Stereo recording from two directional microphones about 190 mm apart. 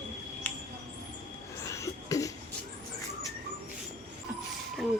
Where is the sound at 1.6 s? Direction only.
15° left (ahead or behind).